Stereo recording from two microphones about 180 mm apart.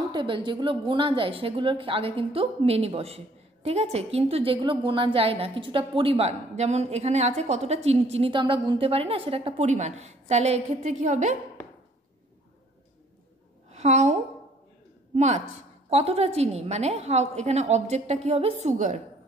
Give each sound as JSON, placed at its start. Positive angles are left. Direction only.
{"t": 0.1, "sound": "a woman's voice", "side_deg": -25}
{"t": 13.7, "sound": "a woman's voice", "side_deg": -40}
{"t": 15.9, "sound": "a woman's voice", "side_deg": -35}